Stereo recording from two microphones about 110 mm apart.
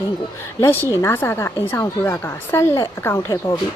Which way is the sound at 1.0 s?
25° left (ahead or behind).